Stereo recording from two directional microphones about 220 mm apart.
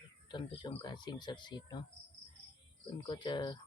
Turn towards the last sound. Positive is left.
turn(degrees=20)  # may be behind; listen again after turning